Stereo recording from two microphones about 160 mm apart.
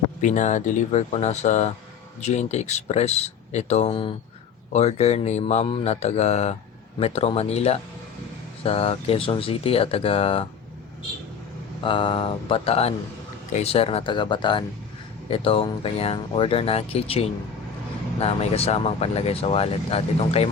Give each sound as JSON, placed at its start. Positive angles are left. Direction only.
{"t": 0.2, "sound": "speech", "side_deg": 50}
{"t": 11.8, "sound": "speech", "side_deg": 30}